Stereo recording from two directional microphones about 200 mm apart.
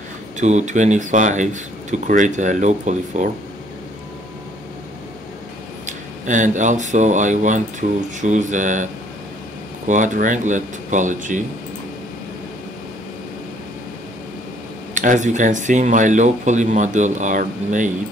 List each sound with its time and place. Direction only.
0.4 s speech: 35° right (ahead or behind)
5.9 s speech: 40° right (ahead or behind)
9.8 s speech: 40° right (ahead or behind)
15.0 s speech: 40° right (ahead or behind)